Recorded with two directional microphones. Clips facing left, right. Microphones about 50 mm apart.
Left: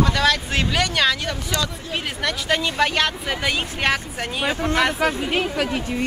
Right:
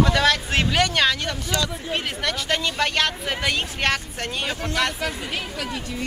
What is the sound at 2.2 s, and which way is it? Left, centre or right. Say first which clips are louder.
Speech: left 4 dB; centre.